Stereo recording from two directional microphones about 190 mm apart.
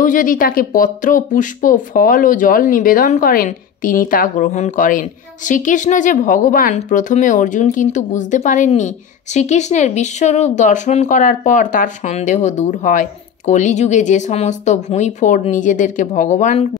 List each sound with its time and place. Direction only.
0.0 s speech: 45° left (ahead or behind)